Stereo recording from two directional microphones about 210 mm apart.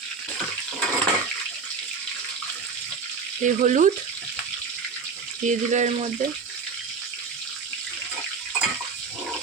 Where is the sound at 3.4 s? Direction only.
35° right (ahead or behind).